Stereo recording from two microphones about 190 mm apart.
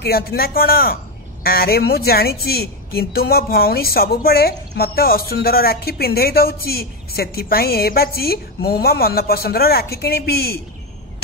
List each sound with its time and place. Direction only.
0.0 s a woman's voice: 55° left (ahead or behind)